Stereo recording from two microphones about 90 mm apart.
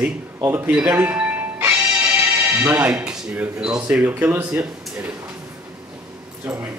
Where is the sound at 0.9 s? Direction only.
20° right (ahead or behind).